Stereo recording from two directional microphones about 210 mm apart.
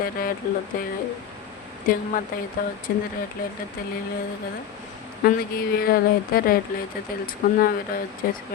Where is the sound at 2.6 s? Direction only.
45° left (ahead or behind).